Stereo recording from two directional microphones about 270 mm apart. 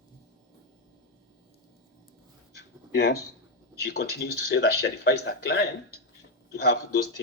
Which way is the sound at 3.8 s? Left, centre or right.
Left.